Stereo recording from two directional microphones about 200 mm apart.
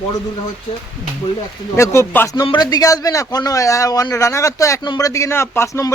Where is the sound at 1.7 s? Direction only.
15° left (ahead or behind).